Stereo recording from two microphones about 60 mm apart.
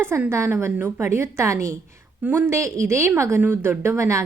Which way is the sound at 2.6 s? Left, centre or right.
Right.